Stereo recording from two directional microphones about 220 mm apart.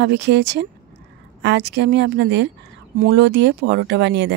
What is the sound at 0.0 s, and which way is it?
Speech, 50° right (ahead or behind).